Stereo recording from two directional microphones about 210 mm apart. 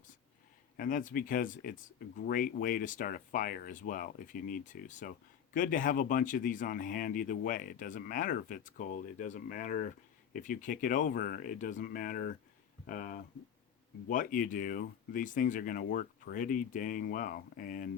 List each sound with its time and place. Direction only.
0.8 s speech: 40° left (ahead or behind)